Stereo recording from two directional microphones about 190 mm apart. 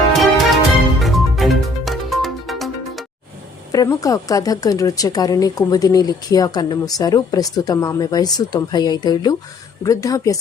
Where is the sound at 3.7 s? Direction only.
20° left (ahead or behind).